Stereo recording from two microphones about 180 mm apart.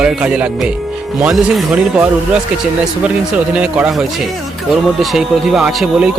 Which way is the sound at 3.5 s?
5° right (ahead or behind).